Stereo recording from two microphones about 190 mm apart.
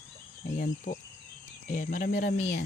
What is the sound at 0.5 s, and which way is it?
Speech, 45° left (ahead or behind).